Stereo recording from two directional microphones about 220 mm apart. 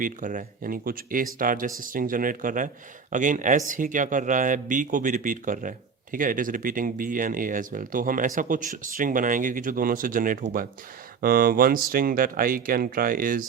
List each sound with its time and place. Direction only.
0.0 s speech: 35° right (ahead or behind)